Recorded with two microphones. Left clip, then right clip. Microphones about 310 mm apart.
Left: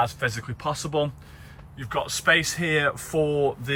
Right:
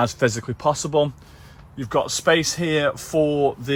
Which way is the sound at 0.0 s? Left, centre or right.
Centre.